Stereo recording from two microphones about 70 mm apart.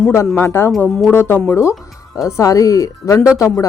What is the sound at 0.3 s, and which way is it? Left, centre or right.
A woman's voice, left.